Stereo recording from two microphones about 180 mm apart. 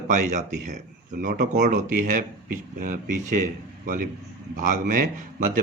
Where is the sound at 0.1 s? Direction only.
45° right (ahead or behind).